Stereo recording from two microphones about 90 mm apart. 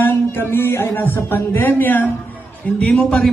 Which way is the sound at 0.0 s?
25° left (ahead or behind).